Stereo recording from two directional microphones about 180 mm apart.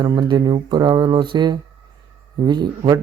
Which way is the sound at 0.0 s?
25° right (ahead or behind).